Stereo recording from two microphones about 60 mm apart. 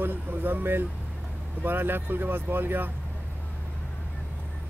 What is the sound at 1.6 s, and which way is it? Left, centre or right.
Speech, right.